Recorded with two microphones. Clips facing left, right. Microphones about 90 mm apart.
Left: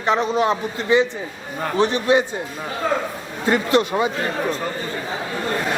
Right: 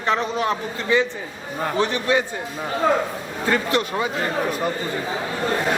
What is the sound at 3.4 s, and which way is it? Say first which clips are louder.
Speech: left 4 dB; 20° left (ahead or behind).